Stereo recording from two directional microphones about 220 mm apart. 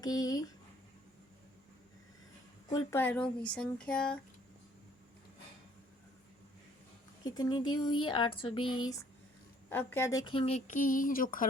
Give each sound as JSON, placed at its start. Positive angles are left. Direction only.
{"t": 0.0, "sound": "speech", "side_deg": 15}
{"t": 2.6, "sound": "speech", "side_deg": 15}
{"t": 7.3, "sound": "speech", "side_deg": 15}